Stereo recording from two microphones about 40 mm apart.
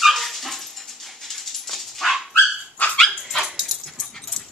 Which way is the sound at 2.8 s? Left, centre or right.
Left.